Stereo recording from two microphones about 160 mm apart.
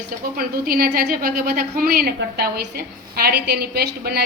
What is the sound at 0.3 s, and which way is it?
A woman's voice, 70° right (ahead or behind).